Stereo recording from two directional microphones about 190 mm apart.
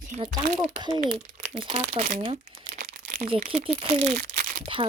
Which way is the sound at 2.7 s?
45° right (ahead or behind).